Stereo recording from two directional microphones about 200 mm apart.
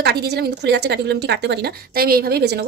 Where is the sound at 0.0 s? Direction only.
55° right (ahead or behind).